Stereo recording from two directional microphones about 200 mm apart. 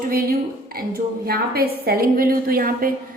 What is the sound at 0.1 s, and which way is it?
A woman's voice, 50° right (ahead or behind).